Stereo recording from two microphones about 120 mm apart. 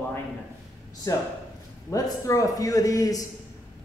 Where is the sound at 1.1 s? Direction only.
30° left (ahead or behind).